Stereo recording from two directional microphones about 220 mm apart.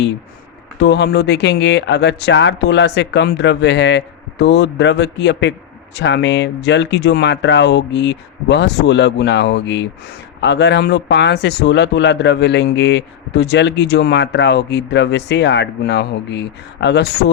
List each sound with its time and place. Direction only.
0.8 s speech: 50° left (ahead or behind)